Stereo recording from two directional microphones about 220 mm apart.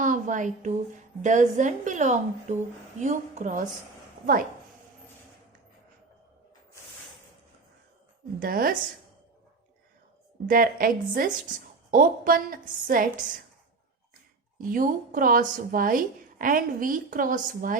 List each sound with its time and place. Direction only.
0.0 s a sound: 35° right (ahead or behind)
1.2 s speech: 35° right (ahead or behind)
8.4 s speech: 40° right (ahead or behind)
10.4 s speech: 40° right (ahead or behind)
14.6 s speech: 40° right (ahead or behind)